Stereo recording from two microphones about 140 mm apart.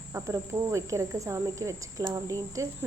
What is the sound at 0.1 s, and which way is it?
Speech, 20° right (ahead or behind).